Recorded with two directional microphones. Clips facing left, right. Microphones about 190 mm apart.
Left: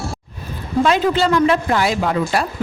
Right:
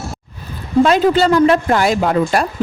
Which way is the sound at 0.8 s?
40° right (ahead or behind).